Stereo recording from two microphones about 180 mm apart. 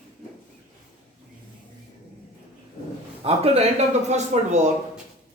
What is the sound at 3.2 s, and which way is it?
A man's voice, 35° right (ahead or behind).